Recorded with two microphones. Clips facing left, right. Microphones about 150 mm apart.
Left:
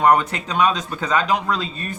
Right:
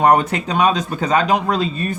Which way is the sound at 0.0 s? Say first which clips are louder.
Right 2 dB; 20° right (ahead or behind).